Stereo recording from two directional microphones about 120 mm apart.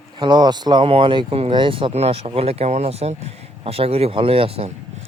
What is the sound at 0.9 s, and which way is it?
Speech, 50° right (ahead or behind).